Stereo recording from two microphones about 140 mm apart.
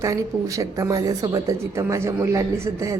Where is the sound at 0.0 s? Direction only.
25° right (ahead or behind).